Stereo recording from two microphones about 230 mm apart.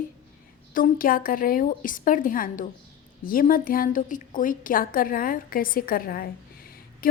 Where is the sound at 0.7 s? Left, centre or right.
Left.